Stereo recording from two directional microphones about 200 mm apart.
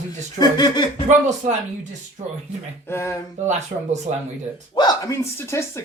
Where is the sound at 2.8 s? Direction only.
10° left (ahead or behind).